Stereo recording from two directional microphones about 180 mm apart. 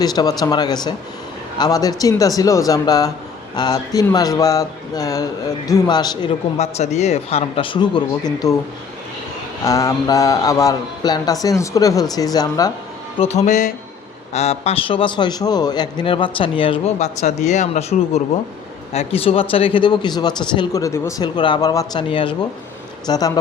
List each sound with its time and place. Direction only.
0.0 s a man's voice: 20° left (ahead or behind)
6.6 s a man's voice: 35° left (ahead or behind); by 8.5 s 20° left (ahead or behind)
9.6 s a man's voice: 20° left (ahead or behind)
13.1 s a man's voice: 35° left (ahead or behind); by 23.4 s 20° left (ahead or behind)